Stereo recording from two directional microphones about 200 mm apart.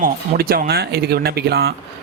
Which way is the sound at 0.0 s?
50° right (ahead or behind).